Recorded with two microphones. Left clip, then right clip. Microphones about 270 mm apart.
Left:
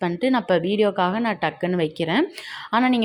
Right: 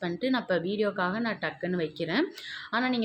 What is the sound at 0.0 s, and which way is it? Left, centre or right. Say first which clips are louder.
A woman's voice: left 8 dB; centre.